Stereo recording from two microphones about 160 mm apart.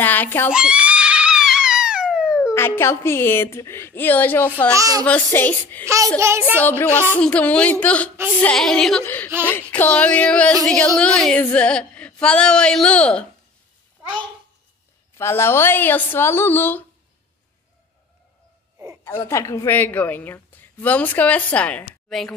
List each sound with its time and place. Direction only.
0.0 s screaming: 10° left (ahead or behind)
0.5 s screaming: 5° right (ahead or behind)
2.5 s a woman's voice: 15° left (ahead or behind)
4.7 s a child's voice: 20° right (ahead or behind)
5.0 s a woman's voice: 10° left (ahead or behind)
6.1 s a child's voice: 15° right (ahead or behind)
6.6 s a woman's voice: 10° left (ahead or behind)
15.1 s a woman's voice: 15° left (ahead or behind)
19.0 s a woman's voice: 15° left (ahead or behind)